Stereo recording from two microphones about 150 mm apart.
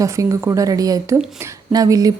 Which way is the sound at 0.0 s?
20° right (ahead or behind).